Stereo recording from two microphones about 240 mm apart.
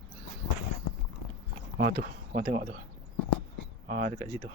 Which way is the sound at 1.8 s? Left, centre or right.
Right.